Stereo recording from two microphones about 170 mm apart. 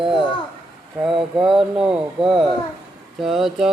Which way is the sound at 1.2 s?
5° right (ahead or behind).